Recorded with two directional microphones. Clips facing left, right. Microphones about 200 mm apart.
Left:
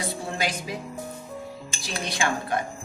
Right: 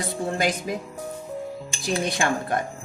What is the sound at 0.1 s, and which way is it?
Speech, 50° right (ahead or behind).